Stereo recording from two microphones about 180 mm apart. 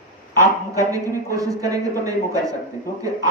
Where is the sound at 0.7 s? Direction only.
20° right (ahead or behind).